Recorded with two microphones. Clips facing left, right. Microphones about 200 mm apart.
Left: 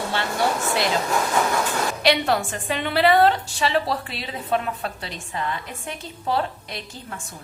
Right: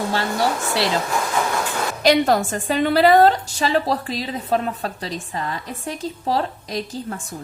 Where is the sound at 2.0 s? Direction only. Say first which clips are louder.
Right 6 dB; 40° right (ahead or behind).